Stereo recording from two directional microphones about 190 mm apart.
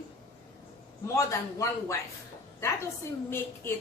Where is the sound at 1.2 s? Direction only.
15° left (ahead or behind).